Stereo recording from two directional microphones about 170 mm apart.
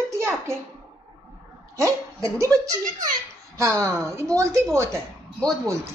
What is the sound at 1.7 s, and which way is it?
A woman's voice, 15° right (ahead or behind).